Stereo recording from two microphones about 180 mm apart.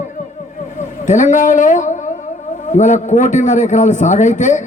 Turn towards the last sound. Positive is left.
turn(degrees=45)  # may be behind; listen again after turning